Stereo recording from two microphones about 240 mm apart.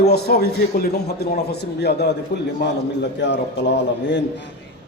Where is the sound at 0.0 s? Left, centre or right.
Left.